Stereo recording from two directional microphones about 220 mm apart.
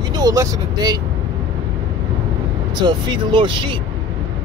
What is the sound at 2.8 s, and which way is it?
Speech, 20° right (ahead or behind).